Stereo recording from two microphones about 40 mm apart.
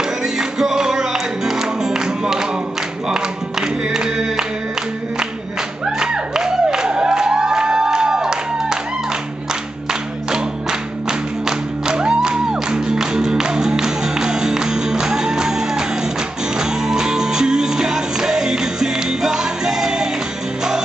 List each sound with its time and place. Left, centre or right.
0.4 s music: centre
5.9 s music: centre
10.3 s music: centre